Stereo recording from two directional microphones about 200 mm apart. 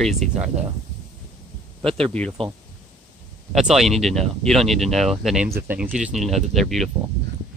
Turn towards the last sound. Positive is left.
turn(degrees=0)  # may be behind; listen again after turning